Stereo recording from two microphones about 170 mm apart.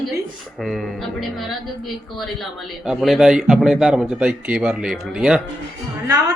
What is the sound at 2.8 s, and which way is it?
A woman's voice, centre (ahead or behind).